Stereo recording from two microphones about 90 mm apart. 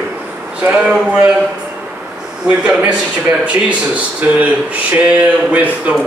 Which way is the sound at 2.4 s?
10° right (ahead or behind).